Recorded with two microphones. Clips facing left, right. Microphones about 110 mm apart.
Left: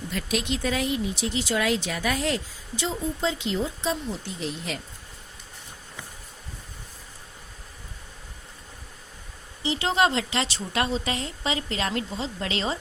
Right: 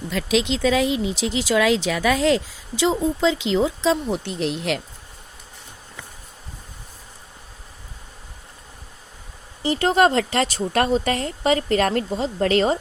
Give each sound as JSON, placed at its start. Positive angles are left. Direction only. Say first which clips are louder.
{"t": 0.2, "sound": "speech", "louder": "right 8 dB", "side_deg": -90}
{"t": 9.6, "sound": "speech", "louder": "right 6 dB", "side_deg": -45}